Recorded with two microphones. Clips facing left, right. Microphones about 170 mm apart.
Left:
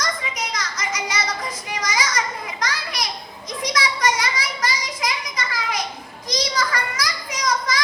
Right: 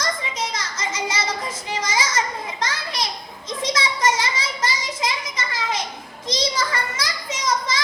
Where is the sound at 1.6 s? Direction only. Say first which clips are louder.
Right 1 dB; 25° right (ahead or behind).